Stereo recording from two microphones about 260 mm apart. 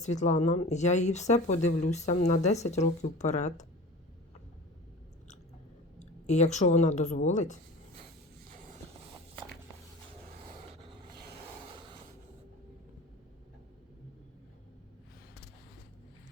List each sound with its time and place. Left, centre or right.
0.0 s speech: left
6.0 s speech: left
11.6 s a sound: centre